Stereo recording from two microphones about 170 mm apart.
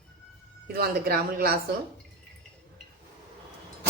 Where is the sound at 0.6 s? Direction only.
65° right (ahead or behind).